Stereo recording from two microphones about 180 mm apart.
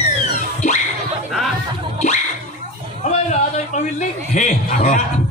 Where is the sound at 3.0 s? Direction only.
40° left (ahead or behind).